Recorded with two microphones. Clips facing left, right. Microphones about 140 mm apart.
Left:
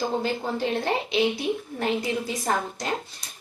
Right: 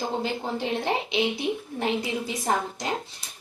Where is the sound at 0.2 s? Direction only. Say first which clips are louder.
Left 2 dB; 20° right (ahead or behind).